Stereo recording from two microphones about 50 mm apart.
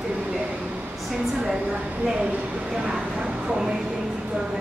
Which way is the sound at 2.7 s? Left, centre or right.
Centre.